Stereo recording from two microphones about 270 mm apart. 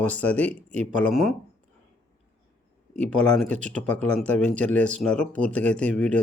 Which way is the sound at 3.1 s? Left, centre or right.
Centre.